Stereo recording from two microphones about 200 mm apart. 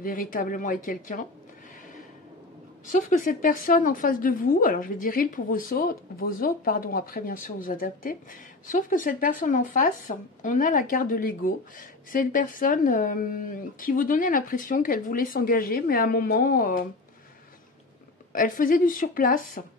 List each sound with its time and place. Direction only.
0.0 s a woman's voice: 45° left (ahead or behind)
2.9 s a woman's voice: 40° left (ahead or behind)
18.3 s a woman's voice: 45° left (ahead or behind)